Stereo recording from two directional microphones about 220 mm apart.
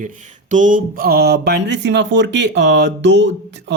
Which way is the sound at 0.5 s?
35° right (ahead or behind).